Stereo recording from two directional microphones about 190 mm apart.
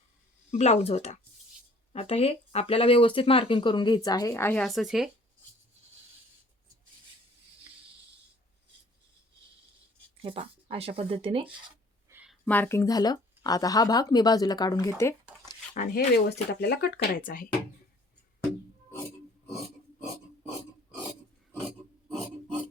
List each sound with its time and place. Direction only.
0.5 s speech: 35° left (ahead or behind); by 4.6 s 10° left (ahead or behind)
4.6 s speech: centre (ahead or behind)
10.2 s speech: 30° right (ahead or behind)
12.0 s a sound: 10° right (ahead or behind)
12.5 s speech: 10° left (ahead or behind)
15.7 s speech: 40° left (ahead or behind)
16.1 s speech: 55° left (ahead or behind)